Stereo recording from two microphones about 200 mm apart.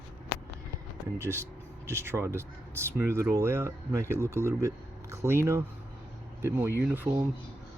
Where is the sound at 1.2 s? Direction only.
15° right (ahead or behind).